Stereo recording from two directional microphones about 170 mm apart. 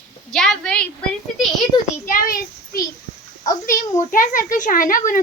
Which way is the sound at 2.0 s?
55° left (ahead or behind).